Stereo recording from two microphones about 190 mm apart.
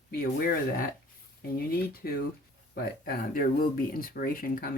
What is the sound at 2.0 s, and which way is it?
Speech, 55° left (ahead or behind).